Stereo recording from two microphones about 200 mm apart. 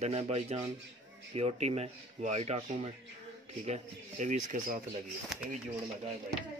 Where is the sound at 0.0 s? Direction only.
30° right (ahead or behind).